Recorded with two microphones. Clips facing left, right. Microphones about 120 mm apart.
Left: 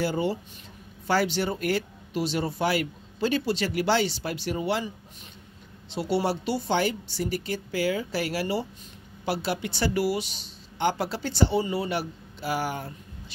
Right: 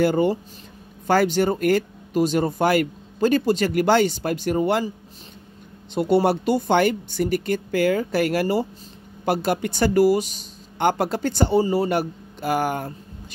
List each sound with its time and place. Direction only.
0.0 s speech: 50° right (ahead or behind)
5.9 s speech: 50° right (ahead or behind)